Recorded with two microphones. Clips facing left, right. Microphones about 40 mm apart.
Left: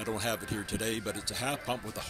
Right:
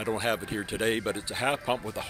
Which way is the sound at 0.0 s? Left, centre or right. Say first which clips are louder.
Right 5 dB; right.